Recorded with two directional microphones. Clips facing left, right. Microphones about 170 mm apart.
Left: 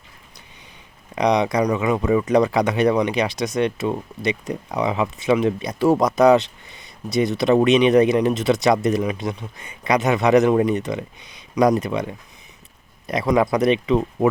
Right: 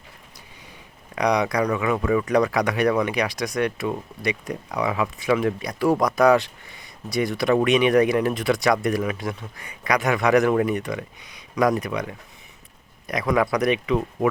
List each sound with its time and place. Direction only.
1.1 s speech: 25° left (ahead or behind)